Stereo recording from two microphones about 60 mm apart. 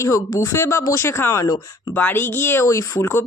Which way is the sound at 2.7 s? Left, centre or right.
Left.